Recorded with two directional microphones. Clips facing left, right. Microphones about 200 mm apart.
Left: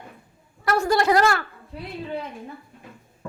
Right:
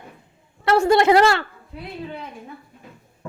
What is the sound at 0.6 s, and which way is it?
Speech, 25° right (ahead or behind).